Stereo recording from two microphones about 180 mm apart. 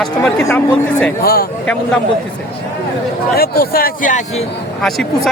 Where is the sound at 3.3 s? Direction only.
55° left (ahead or behind).